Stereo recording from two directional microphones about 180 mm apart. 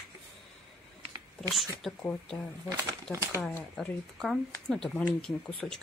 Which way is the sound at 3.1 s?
15° right (ahead or behind).